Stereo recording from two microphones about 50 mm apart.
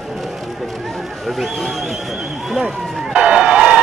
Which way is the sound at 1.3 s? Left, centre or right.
Centre.